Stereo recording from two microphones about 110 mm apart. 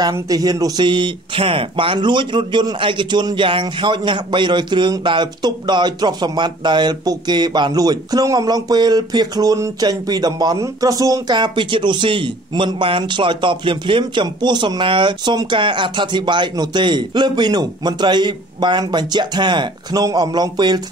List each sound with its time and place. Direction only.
0.1 s speech: 35° right (ahead or behind)